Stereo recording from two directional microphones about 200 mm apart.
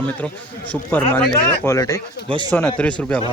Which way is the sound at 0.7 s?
10° left (ahead or behind).